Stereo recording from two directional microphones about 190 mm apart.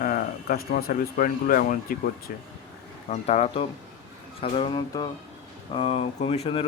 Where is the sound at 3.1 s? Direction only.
35° left (ahead or behind).